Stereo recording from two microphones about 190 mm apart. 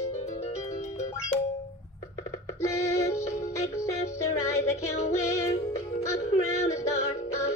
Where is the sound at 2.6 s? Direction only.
15° left (ahead or behind).